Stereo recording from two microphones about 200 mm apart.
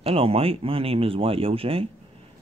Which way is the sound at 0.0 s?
30° right (ahead or behind).